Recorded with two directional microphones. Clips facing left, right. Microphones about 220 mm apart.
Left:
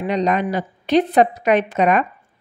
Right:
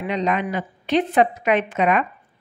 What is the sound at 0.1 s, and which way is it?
A woman's voice, 40° left (ahead or behind).